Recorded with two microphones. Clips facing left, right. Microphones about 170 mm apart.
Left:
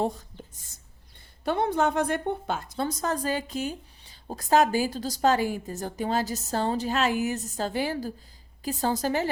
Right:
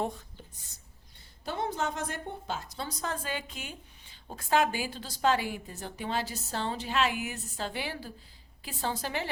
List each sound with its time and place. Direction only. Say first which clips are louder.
0.0 s a woman's voice: left 5 dB; 35° left (ahead or behind)
1.5 s a woman's voice: left 8 dB; 60° left (ahead or behind); by 9.3 s 40° left (ahead or behind)